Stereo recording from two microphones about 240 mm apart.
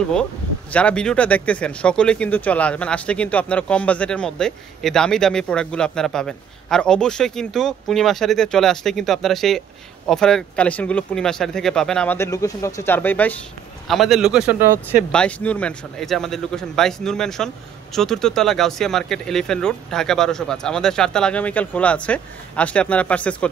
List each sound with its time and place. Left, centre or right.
0.1 s speech: centre
15.0 s speech: centre